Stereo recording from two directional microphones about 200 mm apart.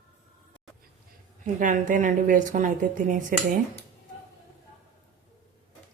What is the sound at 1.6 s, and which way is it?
A woman's voice, 40° right (ahead or behind).